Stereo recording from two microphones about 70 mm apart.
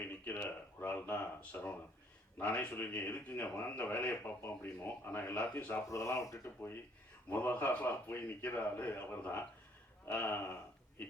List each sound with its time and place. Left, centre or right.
0.1 s a sound: left
2.7 s speech: left
5.9 s speech: left
6.4 s speech: left